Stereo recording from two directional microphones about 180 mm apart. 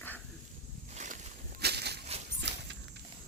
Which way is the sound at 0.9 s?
40° right (ahead or behind).